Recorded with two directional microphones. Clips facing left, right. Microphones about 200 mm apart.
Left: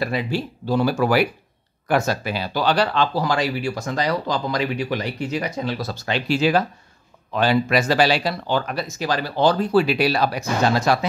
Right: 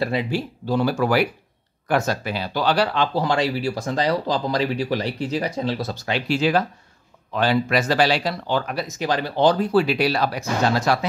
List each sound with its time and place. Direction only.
0.0 s speech: 25° right (ahead or behind)
0.7 s speech: 5° left (ahead or behind)
2.7 s speech: 10° right (ahead or behind); by 5.9 s 30° right (ahead or behind)
5.9 s speech: 5° right (ahead or behind)
7.3 s speech: 15° left (ahead or behind)
8.7 s speech: 20° right (ahead or behind)
9.7 s speech: centre (ahead or behind); by 11.1 s 15° left (ahead or behind)